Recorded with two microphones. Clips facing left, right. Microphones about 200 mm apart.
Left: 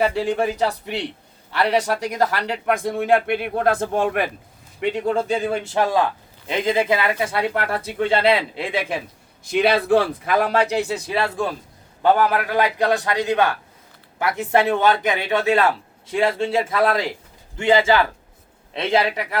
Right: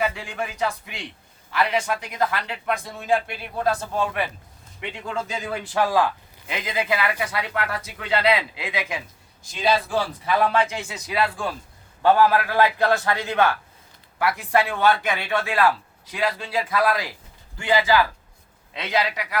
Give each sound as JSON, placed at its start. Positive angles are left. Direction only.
{"t": 0.0, "sound": "a man's voice", "side_deg": 30}
{"t": 4.8, "sound": "speech", "side_deg": 40}
{"t": 5.5, "sound": "a man's voice", "side_deg": 25}
{"t": 9.4, "sound": "a man's voice", "side_deg": 60}